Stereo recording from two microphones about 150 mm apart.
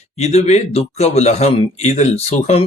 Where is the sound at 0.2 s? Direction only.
50° left (ahead or behind).